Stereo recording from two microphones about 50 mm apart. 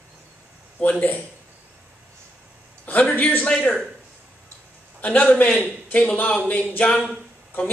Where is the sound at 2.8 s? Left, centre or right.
Left.